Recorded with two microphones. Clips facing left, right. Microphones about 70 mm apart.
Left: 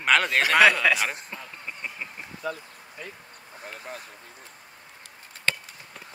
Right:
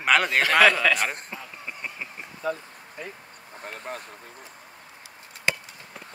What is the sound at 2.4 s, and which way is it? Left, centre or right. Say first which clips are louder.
Speech: right 3 dB; right.